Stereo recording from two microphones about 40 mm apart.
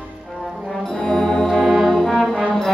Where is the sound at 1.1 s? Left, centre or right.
Centre.